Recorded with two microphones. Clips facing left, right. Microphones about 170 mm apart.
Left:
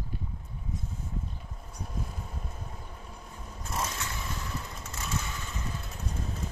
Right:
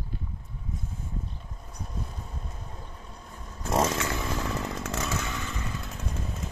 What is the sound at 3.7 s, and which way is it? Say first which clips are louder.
Chainsaw: right 10 dB; 90° right.